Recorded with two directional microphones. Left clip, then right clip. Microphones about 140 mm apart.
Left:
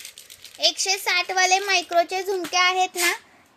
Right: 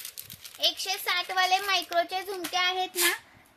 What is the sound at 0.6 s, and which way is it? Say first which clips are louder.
A child's voice: left 6 dB; 35° left (ahead or behind).